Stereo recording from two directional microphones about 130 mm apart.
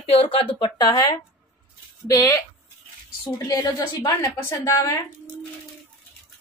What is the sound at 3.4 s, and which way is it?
A woman's voice, 30° left (ahead or behind).